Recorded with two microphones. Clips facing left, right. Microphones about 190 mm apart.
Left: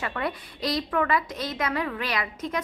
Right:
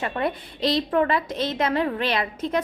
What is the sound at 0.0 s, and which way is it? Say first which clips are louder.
A woman's voice: right 4 dB; 25° right (ahead or behind).